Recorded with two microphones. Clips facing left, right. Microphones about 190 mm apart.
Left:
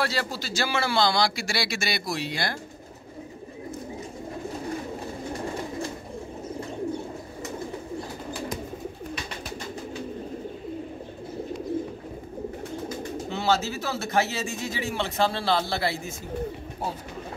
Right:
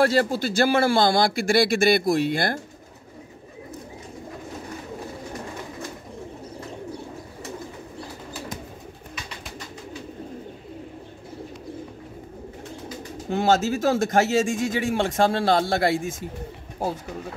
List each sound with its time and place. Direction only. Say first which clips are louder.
0.0 s a man's voice: right 9 dB; 50° right (ahead or behind)
13.3 s a man's voice: right 6 dB; 50° right (ahead or behind)